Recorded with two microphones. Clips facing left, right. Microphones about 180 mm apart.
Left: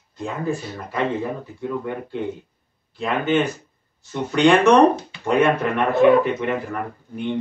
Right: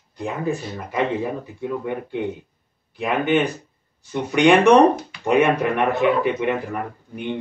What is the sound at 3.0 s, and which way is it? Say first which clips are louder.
Speech: right 1 dB; 15° right (ahead or behind).